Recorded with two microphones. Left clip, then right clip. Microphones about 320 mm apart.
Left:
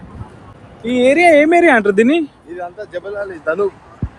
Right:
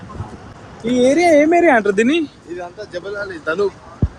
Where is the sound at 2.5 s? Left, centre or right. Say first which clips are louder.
Left 2 dB; left.